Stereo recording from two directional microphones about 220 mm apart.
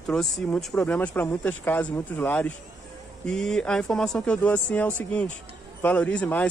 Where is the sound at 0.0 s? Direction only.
5° left (ahead or behind).